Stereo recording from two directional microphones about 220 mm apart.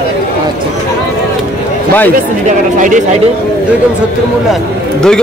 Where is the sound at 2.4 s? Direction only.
35° right (ahead or behind).